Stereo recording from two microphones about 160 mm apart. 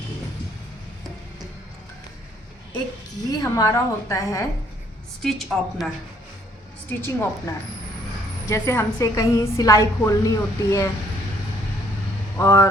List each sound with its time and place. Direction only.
3.2 s a woman's voice: 25° left (ahead or behind)
5.2 s a woman's voice: centre (ahead or behind)
6.8 s a woman's voice: 15° left (ahead or behind)
12.4 s a woman's voice: 20° left (ahead or behind)